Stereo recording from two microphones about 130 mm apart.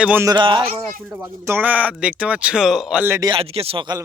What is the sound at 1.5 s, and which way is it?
Speech, 15° right (ahead or behind).